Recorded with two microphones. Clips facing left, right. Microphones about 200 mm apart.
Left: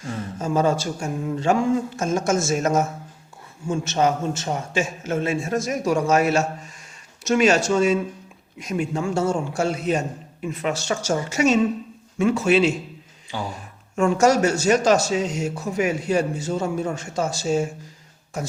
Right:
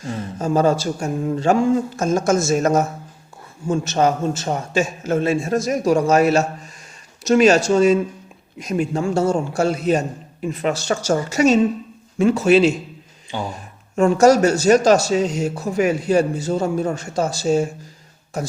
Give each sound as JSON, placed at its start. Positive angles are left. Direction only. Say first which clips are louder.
{"t": 0.0, "sound": "speech", "louder": "right 3 dB", "side_deg": -35}
{"t": 13.3, "sound": "speech", "louder": "right 3 dB", "side_deg": -25}
{"t": 13.9, "sound": "speech", "louder": "right 5 dB", "side_deg": -35}